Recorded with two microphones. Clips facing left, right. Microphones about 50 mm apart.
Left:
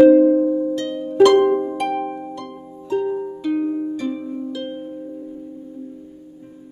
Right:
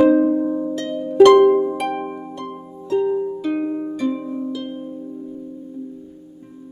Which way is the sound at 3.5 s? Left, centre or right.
Centre.